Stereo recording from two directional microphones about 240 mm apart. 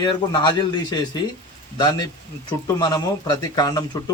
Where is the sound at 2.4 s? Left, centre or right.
Centre.